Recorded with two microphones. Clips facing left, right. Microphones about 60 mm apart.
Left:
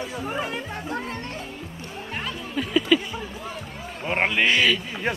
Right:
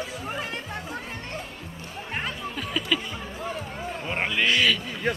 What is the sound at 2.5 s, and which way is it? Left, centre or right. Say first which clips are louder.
Music: left 9 dB; centre.